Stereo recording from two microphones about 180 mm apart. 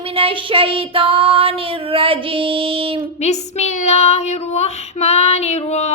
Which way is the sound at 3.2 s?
40° left (ahead or behind).